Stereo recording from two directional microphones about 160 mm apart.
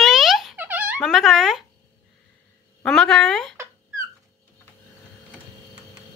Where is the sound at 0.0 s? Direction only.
Centre (ahead or behind).